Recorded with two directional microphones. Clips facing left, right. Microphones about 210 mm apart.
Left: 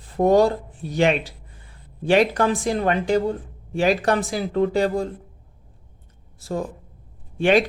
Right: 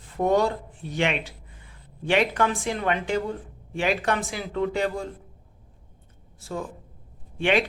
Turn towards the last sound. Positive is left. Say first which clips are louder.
# left 5 dB
turn(degrees=40)  # may be behind; listen again after turning